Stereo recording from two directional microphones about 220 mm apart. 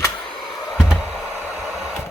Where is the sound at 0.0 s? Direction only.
Centre (ahead or behind).